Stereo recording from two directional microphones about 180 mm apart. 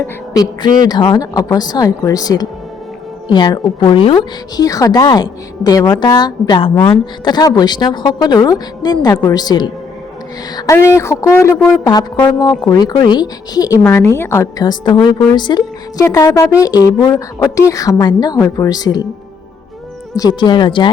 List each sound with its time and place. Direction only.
0.0 s a woman's voice: 20° left (ahead or behind)
20.1 s a woman's voice: 25° left (ahead or behind)